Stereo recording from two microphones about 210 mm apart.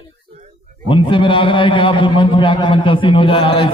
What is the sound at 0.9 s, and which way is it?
A man's voice, 25° left (ahead or behind).